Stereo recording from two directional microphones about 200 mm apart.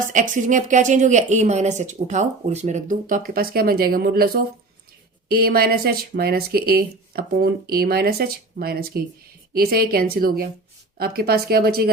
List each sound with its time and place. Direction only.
0.1 s speech: 40° right (ahead or behind)
5.3 s speech: 50° right (ahead or behind)